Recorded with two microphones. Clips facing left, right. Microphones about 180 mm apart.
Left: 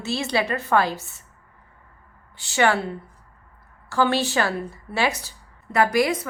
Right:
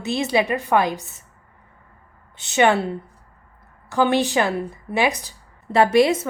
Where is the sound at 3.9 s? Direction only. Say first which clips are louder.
Right 3 dB; 20° right (ahead or behind).